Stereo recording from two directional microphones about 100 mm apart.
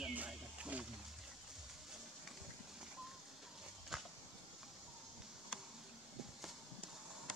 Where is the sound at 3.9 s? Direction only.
5° right (ahead or behind).